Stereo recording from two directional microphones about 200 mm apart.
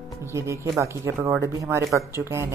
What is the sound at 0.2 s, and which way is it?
A woman's voice, 15° right (ahead or behind).